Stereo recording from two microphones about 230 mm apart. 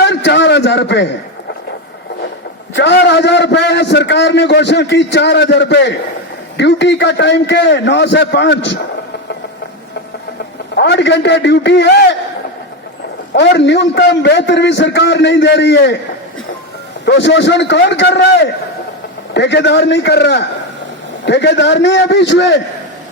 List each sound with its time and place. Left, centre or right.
0.0 s a sound: left
2.7 s a man's voice: left
10.8 s a man's voice: left
13.3 s a man's voice: left
17.1 s a man's voice: left